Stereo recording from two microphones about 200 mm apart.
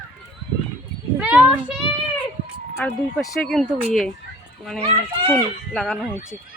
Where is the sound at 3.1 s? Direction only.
Centre (ahead or behind).